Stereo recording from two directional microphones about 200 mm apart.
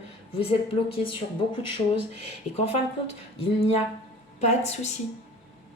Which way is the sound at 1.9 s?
30° left (ahead or behind).